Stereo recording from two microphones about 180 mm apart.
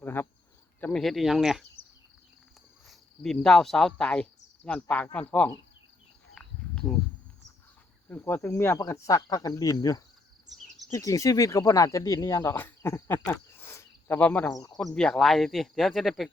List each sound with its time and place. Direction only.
0.0 s cricket: 10° left (ahead or behind)
0.8 s speech: 5° left (ahead or behind)
2.8 s speech: centre (ahead or behind)
6.3 s cricket: 5° left (ahead or behind)
8.1 s speech: 10° left (ahead or behind)
9.6 s cricket: 20° left (ahead or behind)
10.9 s speech: 20° left (ahead or behind); by 16.3 s centre (ahead or behind)